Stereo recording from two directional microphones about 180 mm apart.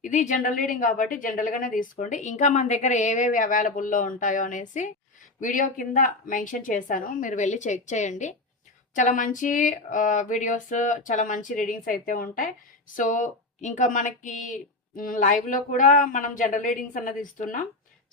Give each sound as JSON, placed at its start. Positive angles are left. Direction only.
{"t": 0.0, "sound": "a woman's voice", "side_deg": 45}